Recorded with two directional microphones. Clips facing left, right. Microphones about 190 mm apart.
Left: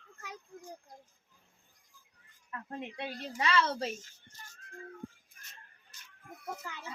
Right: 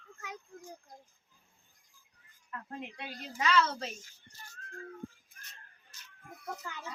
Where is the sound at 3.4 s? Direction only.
30° left (ahead or behind).